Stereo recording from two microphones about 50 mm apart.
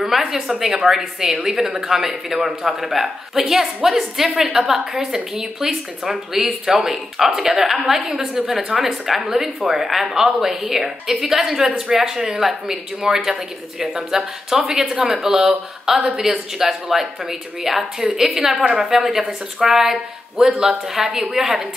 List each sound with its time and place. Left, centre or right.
0.0 s a woman's voice: centre